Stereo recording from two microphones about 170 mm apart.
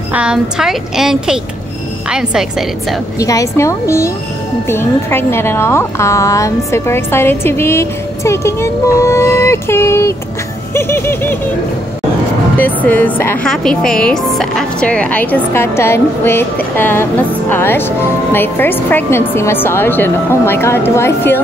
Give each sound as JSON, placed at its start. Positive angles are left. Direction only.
{"t": 0.1, "sound": "a woman's voice", "side_deg": -5}
{"t": 3.2, "sound": "a woman's voice", "side_deg": 20}
{"t": 12.5, "sound": "a woman's voice", "side_deg": 10}